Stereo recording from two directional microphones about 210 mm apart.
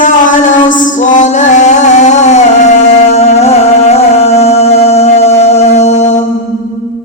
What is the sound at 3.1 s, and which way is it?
Music, 30° left (ahead or behind).